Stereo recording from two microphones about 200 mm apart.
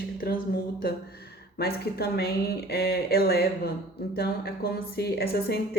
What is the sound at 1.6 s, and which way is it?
Speech, 55° left (ahead or behind).